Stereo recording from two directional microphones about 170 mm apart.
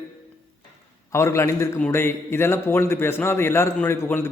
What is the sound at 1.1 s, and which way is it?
A man's voice, 15° left (ahead or behind).